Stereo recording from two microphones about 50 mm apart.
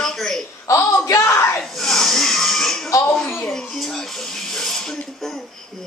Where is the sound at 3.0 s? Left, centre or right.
Centre.